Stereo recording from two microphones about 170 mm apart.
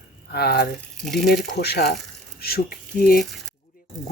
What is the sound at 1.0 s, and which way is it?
Speech, centre (ahead or behind).